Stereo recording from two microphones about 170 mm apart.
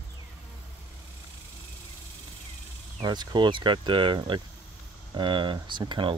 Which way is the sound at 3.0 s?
25° right (ahead or behind).